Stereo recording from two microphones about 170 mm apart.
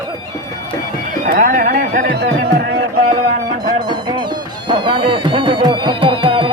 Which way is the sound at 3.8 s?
25° right (ahead or behind).